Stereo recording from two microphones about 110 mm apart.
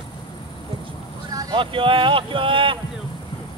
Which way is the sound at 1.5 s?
50° right (ahead or behind).